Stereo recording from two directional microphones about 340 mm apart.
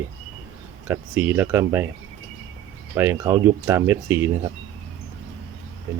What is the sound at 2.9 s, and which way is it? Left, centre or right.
Speech, centre.